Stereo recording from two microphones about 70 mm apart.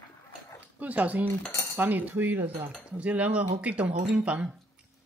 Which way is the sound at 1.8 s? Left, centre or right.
Right.